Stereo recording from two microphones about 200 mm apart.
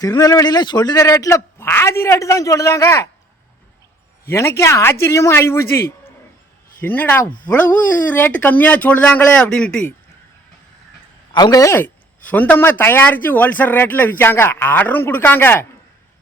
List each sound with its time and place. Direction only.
0.0 s speech: 15° left (ahead or behind)
4.3 s speech: 15° left (ahead or behind)
11.3 s speech: 20° left (ahead or behind)